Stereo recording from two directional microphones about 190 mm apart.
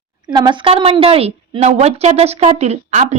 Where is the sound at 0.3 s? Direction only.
25° right (ahead or behind).